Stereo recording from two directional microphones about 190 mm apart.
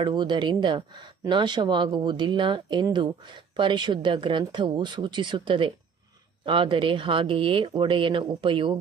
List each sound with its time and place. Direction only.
0.0 s speech: 25° right (ahead or behind)